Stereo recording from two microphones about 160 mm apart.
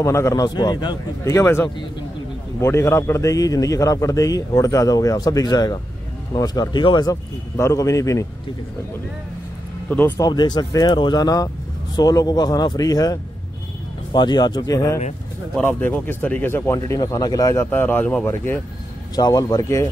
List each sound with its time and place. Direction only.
0.0 s a man's voice: 20° left (ahead or behind)
9.8 s a man's voice: 10° left (ahead or behind)
15.5 s a man's voice: 10° left (ahead or behind)